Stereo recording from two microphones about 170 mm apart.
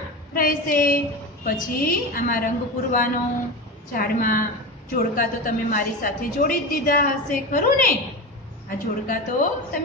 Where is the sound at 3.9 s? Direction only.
55° left (ahead or behind).